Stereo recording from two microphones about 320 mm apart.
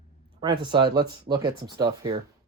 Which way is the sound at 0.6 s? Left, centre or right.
Centre.